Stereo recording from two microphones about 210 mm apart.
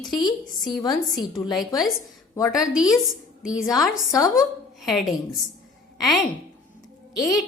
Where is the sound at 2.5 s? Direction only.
Centre (ahead or behind).